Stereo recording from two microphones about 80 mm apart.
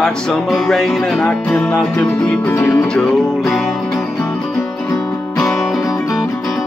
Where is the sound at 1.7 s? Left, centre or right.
Left.